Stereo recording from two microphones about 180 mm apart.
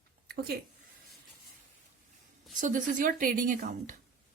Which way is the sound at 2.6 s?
45° right (ahead or behind).